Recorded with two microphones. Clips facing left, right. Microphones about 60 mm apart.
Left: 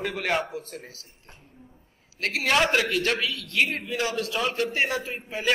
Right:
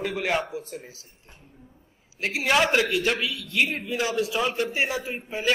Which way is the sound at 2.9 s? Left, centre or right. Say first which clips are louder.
Right 1 dB; centre.